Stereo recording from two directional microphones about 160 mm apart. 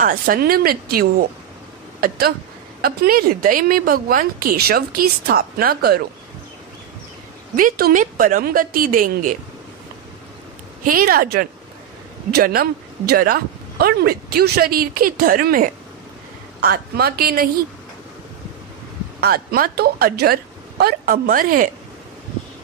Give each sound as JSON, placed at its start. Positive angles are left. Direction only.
{"t": 0.0, "sound": "a woman's voice", "side_deg": -65}
{"t": 7.5, "sound": "a woman's voice", "side_deg": -65}
{"t": 10.8, "sound": "a woman's voice", "side_deg": -60}
{"t": 19.2, "sound": "a woman's voice", "side_deg": -70}